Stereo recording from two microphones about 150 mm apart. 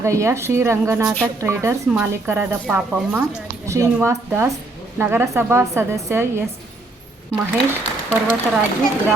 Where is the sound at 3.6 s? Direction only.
20° right (ahead or behind).